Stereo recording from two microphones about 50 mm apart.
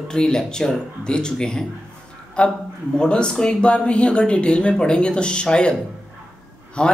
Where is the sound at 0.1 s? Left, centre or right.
Centre.